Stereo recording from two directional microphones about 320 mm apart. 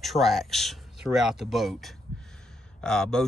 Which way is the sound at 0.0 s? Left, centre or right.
Centre.